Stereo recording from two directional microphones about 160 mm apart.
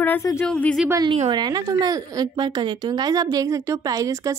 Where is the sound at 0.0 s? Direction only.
15° left (ahead or behind).